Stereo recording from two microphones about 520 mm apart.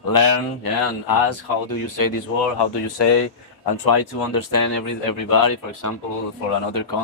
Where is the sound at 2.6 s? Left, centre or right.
Left.